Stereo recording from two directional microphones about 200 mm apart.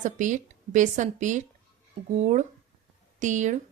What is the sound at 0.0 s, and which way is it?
Speech, 40° right (ahead or behind).